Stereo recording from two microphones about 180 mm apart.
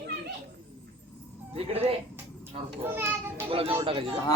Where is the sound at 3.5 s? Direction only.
30° right (ahead or behind).